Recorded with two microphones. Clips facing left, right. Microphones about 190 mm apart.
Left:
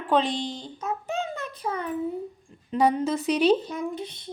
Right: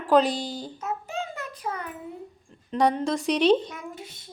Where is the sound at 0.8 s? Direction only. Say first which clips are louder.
Left 3 dB; 20° left (ahead or behind).